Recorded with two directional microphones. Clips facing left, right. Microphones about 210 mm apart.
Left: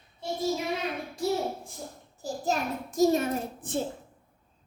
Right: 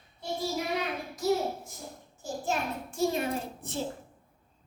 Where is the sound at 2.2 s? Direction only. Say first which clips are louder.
Left 2 dB; 40° left (ahead or behind).